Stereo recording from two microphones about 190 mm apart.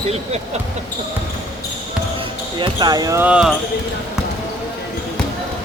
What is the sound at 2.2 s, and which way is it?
Speech, 25° right (ahead or behind).